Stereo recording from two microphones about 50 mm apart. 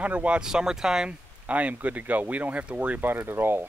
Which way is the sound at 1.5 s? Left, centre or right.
Right.